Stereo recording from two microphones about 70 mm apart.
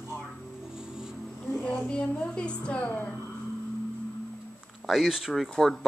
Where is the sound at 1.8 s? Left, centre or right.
Centre.